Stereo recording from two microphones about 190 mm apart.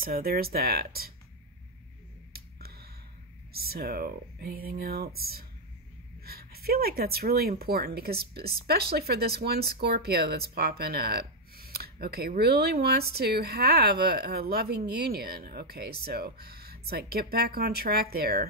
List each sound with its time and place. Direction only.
0.0 s speech: 50° right (ahead or behind)
2.3 s a sound: 55° right (ahead or behind)
3.5 s speech: 55° right (ahead or behind)